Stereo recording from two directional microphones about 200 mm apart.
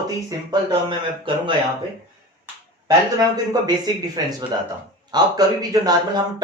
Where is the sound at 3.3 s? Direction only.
20° right (ahead or behind).